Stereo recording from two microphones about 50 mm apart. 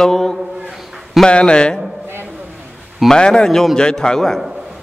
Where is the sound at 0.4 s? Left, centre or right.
Centre.